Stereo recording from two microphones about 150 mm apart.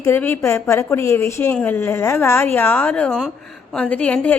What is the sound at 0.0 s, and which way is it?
Speech, 15° left (ahead or behind).